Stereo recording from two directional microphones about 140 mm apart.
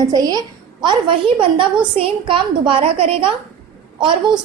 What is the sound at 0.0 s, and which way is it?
A woman's voice, 25° right (ahead or behind).